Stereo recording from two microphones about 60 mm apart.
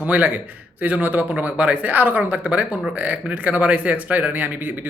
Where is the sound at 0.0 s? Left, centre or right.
Right.